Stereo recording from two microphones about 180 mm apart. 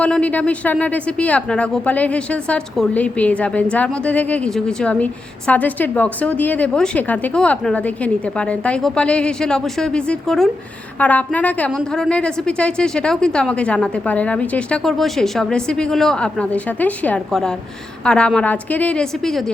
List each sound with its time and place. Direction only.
0.0 s a woman's voice: 5° left (ahead or behind)